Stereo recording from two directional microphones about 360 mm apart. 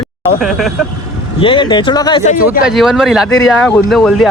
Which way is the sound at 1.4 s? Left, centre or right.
Centre.